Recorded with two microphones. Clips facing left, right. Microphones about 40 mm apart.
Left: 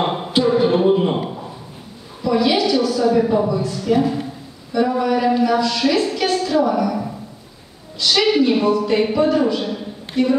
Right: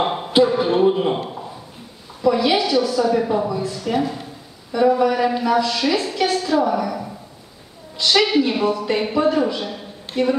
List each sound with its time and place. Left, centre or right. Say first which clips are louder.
0.0 s a sound: right 1 dB; centre
2.2 s a woman's voice: even; centre
8.0 s a woman's voice: right 1 dB; centre
8.3 s a woman's voice: left 3 dB; centre
10.1 s speech: left 1 dB; right